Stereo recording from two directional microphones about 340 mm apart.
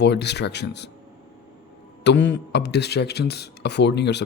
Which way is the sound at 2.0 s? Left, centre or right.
Left.